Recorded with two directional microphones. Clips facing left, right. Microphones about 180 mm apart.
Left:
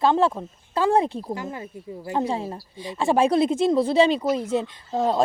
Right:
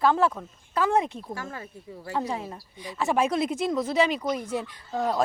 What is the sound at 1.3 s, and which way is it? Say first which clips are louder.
A woman's voice: left 5 dB; 20° left (ahead or behind).